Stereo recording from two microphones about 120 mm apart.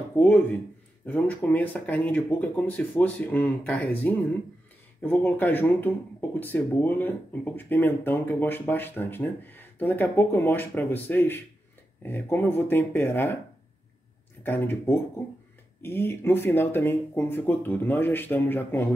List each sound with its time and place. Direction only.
0.2 s speech: 15° left (ahead or behind)
14.4 s speech: 15° left (ahead or behind)